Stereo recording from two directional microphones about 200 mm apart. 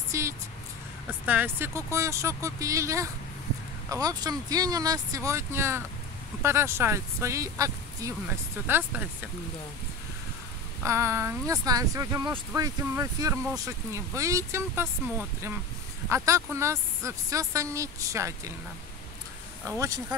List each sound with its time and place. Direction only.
0.1 s vehicle: 15° right (ahead or behind)
1.2 s speech: 10° right (ahead or behind)
10.8 s speech: 15° right (ahead or behind)
19.6 s speech: 15° right (ahead or behind)